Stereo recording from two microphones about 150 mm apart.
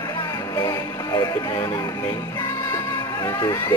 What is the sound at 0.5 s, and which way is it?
Music, 25° left (ahead or behind).